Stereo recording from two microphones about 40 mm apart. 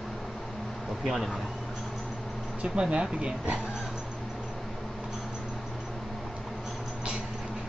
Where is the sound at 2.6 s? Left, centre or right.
Right.